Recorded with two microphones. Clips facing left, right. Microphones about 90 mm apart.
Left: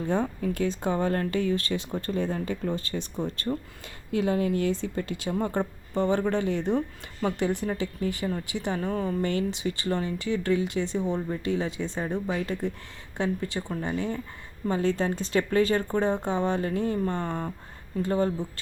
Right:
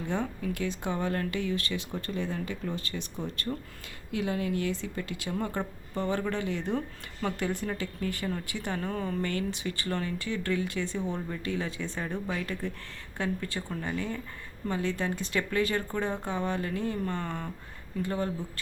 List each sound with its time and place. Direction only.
0.1 s speech: 35° left (ahead or behind)
6.7 s speech: 15° left (ahead or behind)
8.8 s speech: 10° left (ahead or behind)
9.2 s speech: 20° left (ahead or behind)